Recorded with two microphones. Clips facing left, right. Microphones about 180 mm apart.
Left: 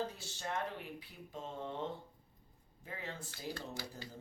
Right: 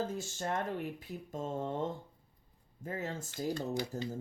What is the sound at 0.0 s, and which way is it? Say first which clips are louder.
Speech: right 5 dB; 45° right (ahead or behind).